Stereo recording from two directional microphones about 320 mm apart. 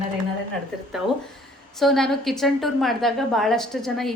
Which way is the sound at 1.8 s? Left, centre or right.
Centre.